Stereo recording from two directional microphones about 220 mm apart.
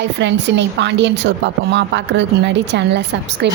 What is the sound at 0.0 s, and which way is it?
A woman's voice, 55° right (ahead or behind).